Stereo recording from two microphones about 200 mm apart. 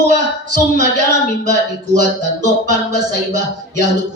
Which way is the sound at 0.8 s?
55° left (ahead or behind).